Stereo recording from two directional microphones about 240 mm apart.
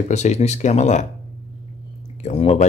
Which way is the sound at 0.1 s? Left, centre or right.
Left.